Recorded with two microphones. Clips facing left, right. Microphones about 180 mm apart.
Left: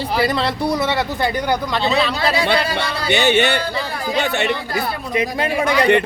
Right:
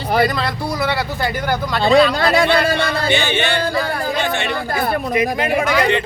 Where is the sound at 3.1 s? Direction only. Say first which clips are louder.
Left 5 dB; 65° left (ahead or behind).